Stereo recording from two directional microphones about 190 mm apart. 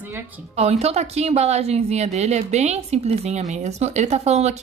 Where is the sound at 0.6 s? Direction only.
35° right (ahead or behind).